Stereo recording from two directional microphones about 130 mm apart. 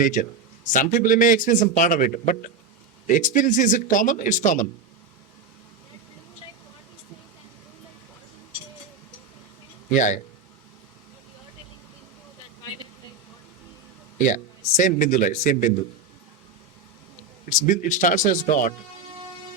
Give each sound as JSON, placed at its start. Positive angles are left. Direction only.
{"t": 0.0, "sound": "a man's voice", "side_deg": 80}
{"t": 3.1, "sound": "a man's voice", "side_deg": 80}
{"t": 9.9, "sound": "a man's voice", "side_deg": 75}
{"t": 14.2, "sound": "a man's voice", "side_deg": 75}
{"t": 17.5, "sound": "a man's voice", "side_deg": 80}